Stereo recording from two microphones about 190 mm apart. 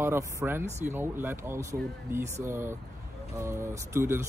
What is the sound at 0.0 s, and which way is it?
Speech, 10° right (ahead or behind).